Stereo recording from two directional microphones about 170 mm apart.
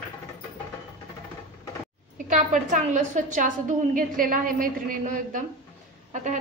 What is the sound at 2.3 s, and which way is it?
A woman's voice, 45° right (ahead or behind).